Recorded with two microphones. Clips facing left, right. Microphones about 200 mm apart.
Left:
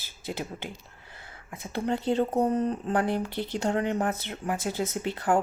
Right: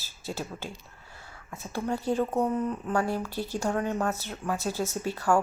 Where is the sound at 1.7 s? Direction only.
25° left (ahead or behind).